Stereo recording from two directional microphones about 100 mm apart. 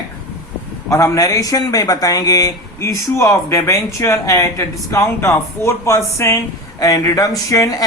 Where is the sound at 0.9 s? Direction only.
30° left (ahead or behind).